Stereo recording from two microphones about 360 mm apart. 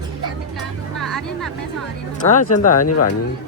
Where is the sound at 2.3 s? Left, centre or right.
Left.